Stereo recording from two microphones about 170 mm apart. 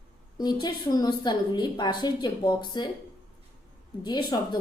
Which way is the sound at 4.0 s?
25° left (ahead or behind).